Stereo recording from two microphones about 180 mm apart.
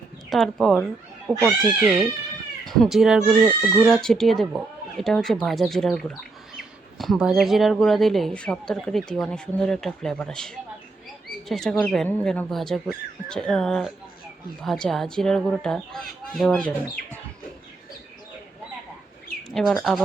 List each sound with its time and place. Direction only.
0.3 s speech: centre (ahead or behind)
2.6 s speech: centre (ahead or behind)
19.5 s speech: centre (ahead or behind)